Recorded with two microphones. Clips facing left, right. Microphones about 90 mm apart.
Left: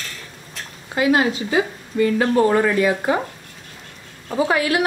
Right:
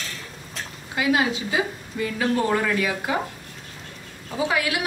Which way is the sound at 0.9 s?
45° left (ahead or behind).